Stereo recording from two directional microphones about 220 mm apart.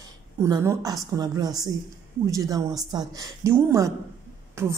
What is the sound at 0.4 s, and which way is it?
Speech, 15° right (ahead or behind).